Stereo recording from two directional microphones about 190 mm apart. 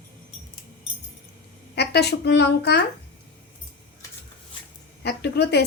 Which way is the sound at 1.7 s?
60° left (ahead or behind).